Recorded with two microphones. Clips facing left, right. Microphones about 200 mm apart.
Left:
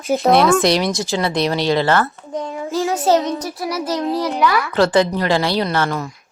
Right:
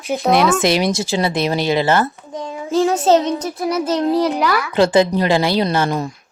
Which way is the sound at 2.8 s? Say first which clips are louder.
Right 3 dB; 30° right (ahead or behind).